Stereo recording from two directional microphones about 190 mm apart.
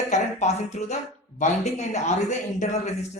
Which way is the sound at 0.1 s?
35° left (ahead or behind).